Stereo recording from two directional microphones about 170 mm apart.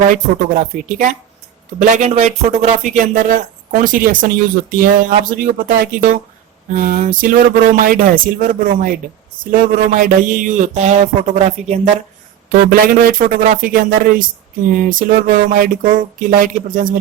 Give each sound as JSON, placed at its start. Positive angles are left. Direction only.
{"t": 0.1, "sound": "speech", "side_deg": -50}
{"t": 12.5, "sound": "a man's voice", "side_deg": -55}